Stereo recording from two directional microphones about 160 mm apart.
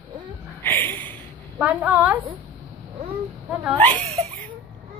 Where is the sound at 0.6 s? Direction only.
10° left (ahead or behind).